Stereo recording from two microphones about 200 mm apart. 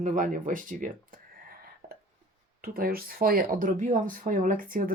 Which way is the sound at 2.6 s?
50° right (ahead or behind).